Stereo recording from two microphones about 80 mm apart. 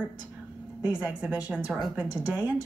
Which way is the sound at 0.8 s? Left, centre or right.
Centre.